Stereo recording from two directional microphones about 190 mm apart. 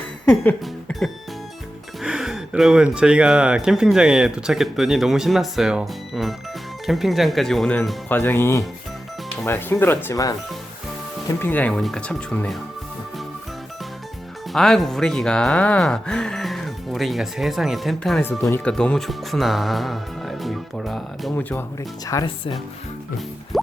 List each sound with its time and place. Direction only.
0.3 s speech: 5° left (ahead or behind)
14.5 s speech: centre (ahead or behind)
18.3 s speech: 15° left (ahead or behind)
22.0 s speech: 20° left (ahead or behind)